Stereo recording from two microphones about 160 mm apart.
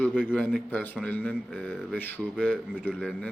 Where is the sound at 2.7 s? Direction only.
5° right (ahead or behind).